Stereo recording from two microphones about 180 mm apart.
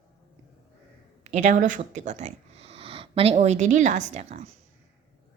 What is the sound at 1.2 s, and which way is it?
Speech, 40° right (ahead or behind).